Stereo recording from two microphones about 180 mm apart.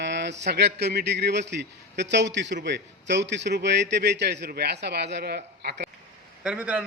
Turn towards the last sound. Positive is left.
turn(degrees=-5)  # may be behind; listen again after turning